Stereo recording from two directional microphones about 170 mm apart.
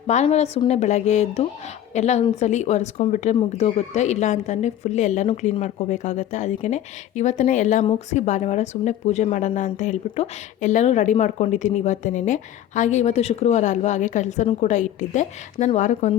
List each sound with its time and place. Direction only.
0.1 s a woman's voice: 40° left (ahead or behind)